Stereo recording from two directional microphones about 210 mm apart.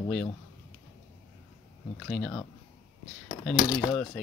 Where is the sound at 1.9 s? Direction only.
Centre (ahead or behind).